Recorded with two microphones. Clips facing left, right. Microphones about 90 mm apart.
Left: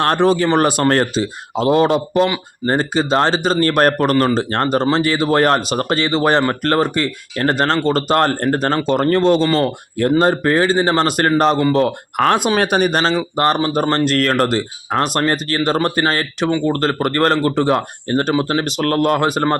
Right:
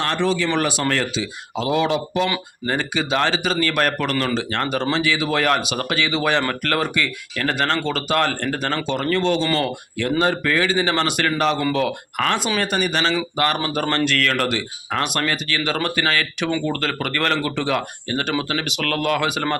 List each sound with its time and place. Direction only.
0.0 s speech: 50° left (ahead or behind)